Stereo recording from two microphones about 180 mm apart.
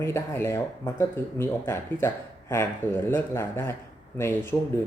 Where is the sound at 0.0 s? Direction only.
15° left (ahead or behind).